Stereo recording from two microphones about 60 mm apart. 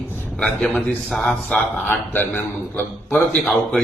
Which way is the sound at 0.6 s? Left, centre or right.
Centre.